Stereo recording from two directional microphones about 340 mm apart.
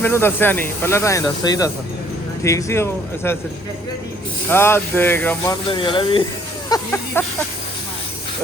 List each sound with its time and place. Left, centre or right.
0.0 s speech: centre
4.4 s speech: centre